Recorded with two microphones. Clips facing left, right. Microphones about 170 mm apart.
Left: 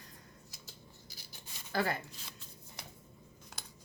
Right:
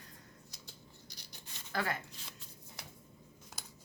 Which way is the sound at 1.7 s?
35° left (ahead or behind).